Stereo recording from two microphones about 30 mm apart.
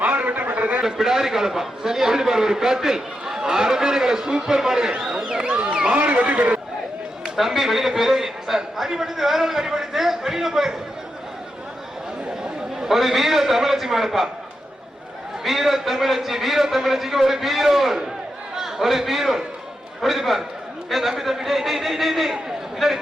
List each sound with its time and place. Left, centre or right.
0.0 s a sound: right
0.5 s a sound: right
0.9 s a man's voice: centre
5.5 s speech: right
6.0 s speech: right
7.3 s a man's voice: centre
12.4 s a man's voice: centre
15.4 s a man's voice: centre